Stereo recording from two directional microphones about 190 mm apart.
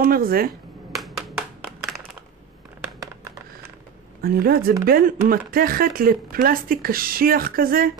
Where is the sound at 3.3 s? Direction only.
15° right (ahead or behind).